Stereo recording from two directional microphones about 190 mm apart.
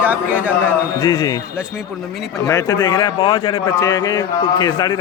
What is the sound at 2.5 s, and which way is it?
Speech, 20° left (ahead or behind).